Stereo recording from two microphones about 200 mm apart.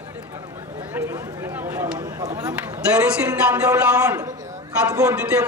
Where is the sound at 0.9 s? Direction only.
15° right (ahead or behind).